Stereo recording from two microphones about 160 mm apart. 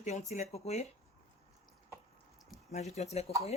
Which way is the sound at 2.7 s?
45° left (ahead or behind).